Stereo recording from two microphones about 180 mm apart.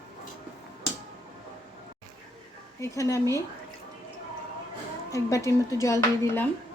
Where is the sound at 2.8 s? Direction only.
15° left (ahead or behind).